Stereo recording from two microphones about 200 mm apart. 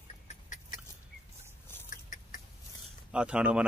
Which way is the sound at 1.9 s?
40° left (ahead or behind).